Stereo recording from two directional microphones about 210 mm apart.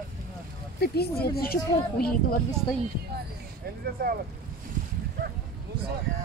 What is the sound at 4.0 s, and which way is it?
Speech, 45° right (ahead or behind).